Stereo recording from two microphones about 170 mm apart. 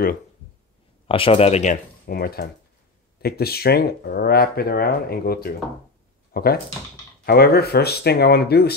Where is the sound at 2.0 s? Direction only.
65° left (ahead or behind).